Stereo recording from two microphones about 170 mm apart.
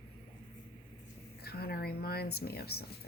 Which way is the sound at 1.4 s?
65° left (ahead or behind).